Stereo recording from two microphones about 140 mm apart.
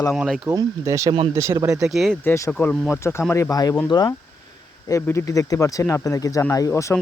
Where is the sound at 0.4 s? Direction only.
25° right (ahead or behind).